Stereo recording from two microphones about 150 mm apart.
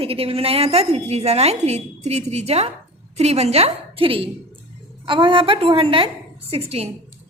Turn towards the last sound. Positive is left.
turn(degrees=-40)  # may be behind; listen again after turning